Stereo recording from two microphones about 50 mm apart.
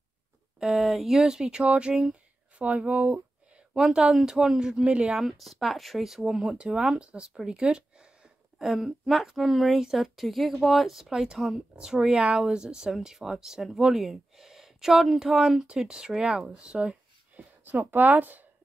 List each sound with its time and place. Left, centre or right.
0.6 s speech: centre
2.6 s speech: right
3.7 s speech: centre
5.2 s a woman's voice: centre
6.2 s speech: centre
7.4 s a sound: centre
8.6 s a woman's voice: centre; by 18.4 s right